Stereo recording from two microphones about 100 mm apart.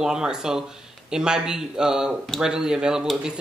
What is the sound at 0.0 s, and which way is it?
Speech, 5° right (ahead or behind).